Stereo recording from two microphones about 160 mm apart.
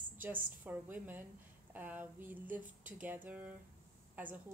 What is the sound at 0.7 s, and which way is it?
Speech, 10° right (ahead or behind).